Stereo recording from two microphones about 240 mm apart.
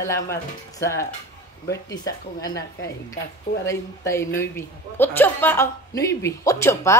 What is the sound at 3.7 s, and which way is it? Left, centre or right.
A woman's voice, centre.